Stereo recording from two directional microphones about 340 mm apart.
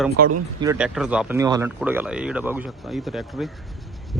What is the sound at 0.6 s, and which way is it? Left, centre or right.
Speech, centre.